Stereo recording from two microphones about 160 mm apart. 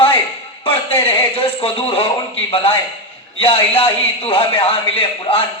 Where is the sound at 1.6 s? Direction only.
35° left (ahead or behind).